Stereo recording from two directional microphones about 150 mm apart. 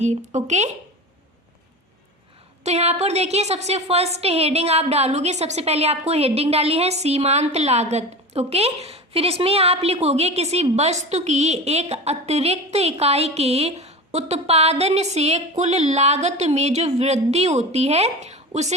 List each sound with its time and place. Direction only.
0.0 s a woman's voice: 50° right (ahead or behind)
2.6 s a woman's voice: 45° right (ahead or behind)